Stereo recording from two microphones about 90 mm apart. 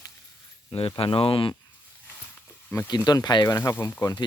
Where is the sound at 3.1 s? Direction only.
50° left (ahead or behind).